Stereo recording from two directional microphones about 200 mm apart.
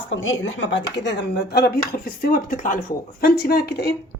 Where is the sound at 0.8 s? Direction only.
25° left (ahead or behind).